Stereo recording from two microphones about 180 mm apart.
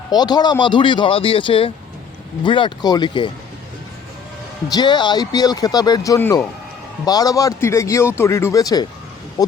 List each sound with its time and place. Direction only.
0.1 s speech: 25° left (ahead or behind)
4.7 s a man's voice: 25° left (ahead or behind)